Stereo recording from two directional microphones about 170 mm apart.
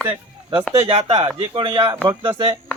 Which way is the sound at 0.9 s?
35° right (ahead or behind).